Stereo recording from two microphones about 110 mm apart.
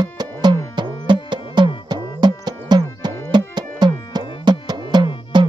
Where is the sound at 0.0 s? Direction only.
40° right (ahead or behind).